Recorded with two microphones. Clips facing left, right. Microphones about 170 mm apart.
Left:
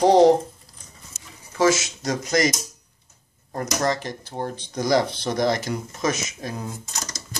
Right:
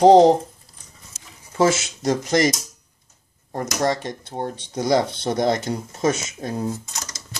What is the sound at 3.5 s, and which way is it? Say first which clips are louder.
Speech: right 2 dB; 25° right (ahead or behind).